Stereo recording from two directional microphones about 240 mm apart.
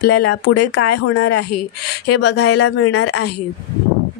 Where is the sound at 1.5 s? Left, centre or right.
Left.